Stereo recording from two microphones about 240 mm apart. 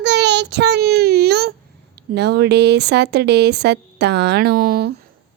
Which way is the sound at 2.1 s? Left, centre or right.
Right.